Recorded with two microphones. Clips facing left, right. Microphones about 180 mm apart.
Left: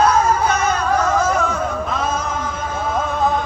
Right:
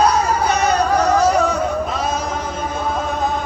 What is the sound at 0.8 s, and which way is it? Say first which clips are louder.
Music: right 3 dB; 40° right (ahead or behind).